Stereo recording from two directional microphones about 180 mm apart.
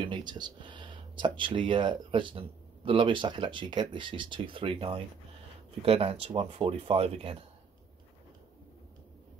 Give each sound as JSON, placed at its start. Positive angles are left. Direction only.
{"t": 0.0, "sound": "speech", "side_deg": -25}